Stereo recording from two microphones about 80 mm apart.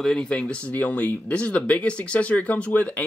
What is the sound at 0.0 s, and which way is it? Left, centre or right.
Speech, centre.